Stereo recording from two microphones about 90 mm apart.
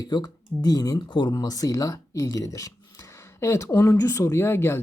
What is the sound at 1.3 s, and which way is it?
Speech, 40° left (ahead or behind).